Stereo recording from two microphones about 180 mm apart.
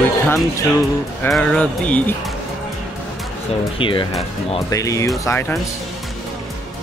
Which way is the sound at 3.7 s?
30° left (ahead or behind).